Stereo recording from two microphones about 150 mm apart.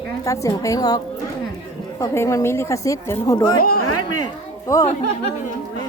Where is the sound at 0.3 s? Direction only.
20° left (ahead or behind).